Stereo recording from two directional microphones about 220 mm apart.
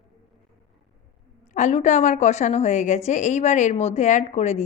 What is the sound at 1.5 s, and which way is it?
A woman's voice, 30° left (ahead or behind).